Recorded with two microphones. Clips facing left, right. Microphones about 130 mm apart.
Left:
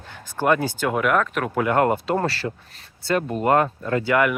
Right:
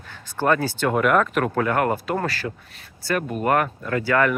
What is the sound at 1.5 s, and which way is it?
Speech, 20° left (ahead or behind).